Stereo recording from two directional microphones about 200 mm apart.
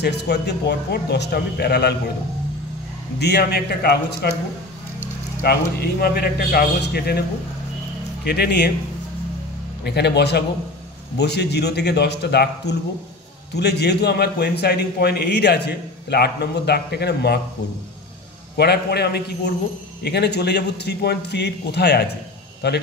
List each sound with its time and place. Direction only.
0.0 s a man's voice: 55° left (ahead or behind)
3.2 s a man's voice: 55° left (ahead or behind)
9.8 s a man's voice: 55° left (ahead or behind)
18.6 s a man's voice: 55° left (ahead or behind)